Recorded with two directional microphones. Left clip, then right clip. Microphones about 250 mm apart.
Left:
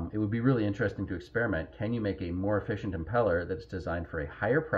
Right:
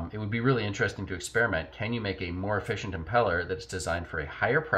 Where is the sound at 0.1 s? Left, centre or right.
Right.